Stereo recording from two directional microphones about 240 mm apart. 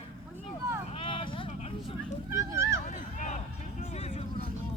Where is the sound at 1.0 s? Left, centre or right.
Left.